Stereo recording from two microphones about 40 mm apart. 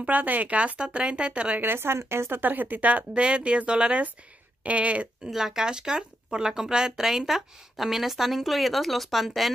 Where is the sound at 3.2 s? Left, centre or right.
Right.